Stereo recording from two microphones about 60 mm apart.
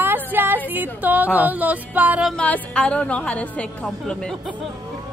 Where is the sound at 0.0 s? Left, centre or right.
Right.